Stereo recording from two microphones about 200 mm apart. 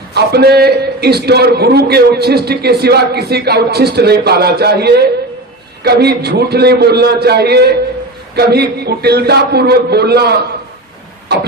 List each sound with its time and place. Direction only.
0.1 s a man's voice: 55° right (ahead or behind)